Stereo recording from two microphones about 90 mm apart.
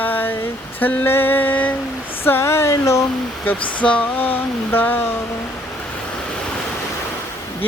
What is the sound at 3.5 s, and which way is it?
Speech, 15° left (ahead or behind).